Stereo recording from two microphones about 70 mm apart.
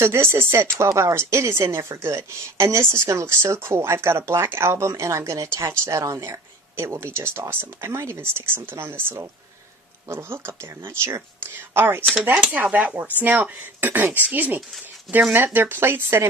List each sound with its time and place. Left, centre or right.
0.0 s a woman's voice: right